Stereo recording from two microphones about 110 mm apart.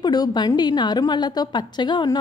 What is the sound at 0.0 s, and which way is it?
A woman's voice, 40° left (ahead or behind).